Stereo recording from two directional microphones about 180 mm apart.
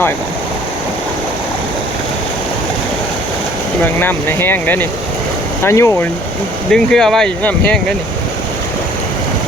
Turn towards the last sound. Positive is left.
turn(degrees=5)  # may be behind; listen again after turning